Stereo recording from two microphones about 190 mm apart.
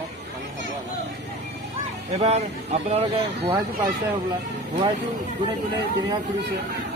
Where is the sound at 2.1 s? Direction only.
35° right (ahead or behind).